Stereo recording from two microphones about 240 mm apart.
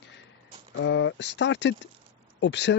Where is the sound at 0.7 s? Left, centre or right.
Left.